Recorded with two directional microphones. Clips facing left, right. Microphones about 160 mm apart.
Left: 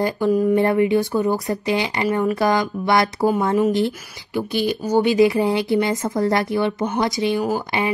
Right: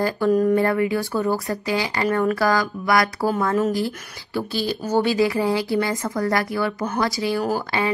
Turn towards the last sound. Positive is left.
turn(degrees=15)  # may be behind; listen again after turning